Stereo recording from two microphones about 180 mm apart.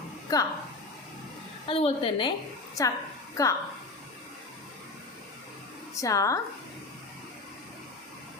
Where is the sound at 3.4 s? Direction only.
15° left (ahead or behind).